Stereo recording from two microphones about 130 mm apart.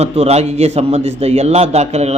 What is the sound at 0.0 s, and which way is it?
A man's voice, 55° right (ahead or behind).